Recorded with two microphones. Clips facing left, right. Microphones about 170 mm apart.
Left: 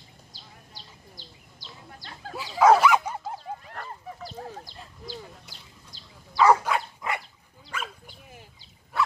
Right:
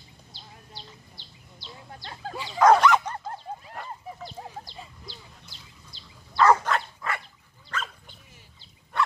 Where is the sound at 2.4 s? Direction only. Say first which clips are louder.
Even; 5° left (ahead or behind).